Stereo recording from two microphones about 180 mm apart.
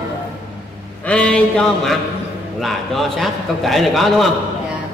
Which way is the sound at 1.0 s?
5° left (ahead or behind).